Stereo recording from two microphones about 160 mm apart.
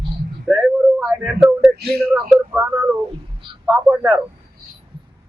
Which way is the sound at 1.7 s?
85° right.